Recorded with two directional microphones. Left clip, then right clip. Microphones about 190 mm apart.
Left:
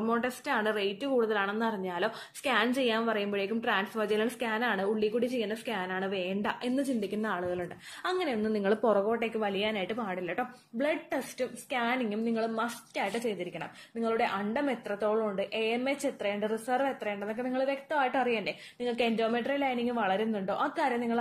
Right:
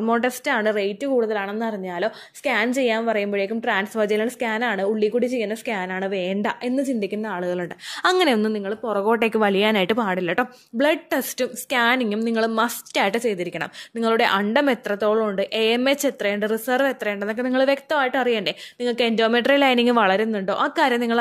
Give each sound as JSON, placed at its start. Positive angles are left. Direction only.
{"t": 0.0, "sound": "a woman's voice", "side_deg": -40}
{"t": 7.3, "sound": "a woman's voice", "side_deg": -50}